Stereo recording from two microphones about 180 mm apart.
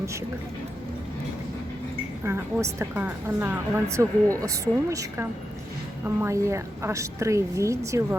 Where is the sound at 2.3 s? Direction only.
15° right (ahead or behind).